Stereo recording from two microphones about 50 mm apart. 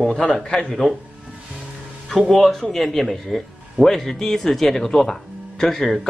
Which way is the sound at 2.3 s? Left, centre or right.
Centre.